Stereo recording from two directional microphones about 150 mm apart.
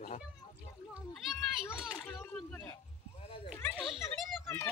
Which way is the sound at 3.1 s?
40° left (ahead or behind).